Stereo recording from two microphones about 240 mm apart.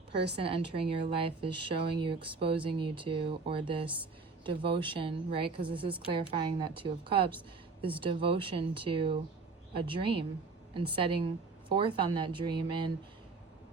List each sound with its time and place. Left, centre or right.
0.1 s a woman's voice: right
0.4 s speech: right